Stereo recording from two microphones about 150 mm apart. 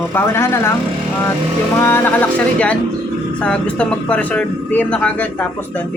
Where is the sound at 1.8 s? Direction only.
15° left (ahead or behind).